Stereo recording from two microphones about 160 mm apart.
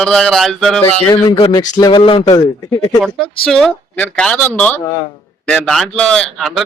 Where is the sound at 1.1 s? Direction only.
30° left (ahead or behind).